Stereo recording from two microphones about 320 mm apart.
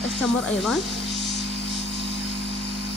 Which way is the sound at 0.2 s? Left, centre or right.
Centre.